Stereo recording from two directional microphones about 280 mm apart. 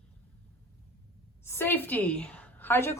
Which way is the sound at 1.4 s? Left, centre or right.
Centre.